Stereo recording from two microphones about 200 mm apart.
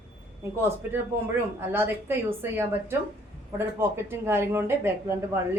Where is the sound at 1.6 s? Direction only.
10° right (ahead or behind).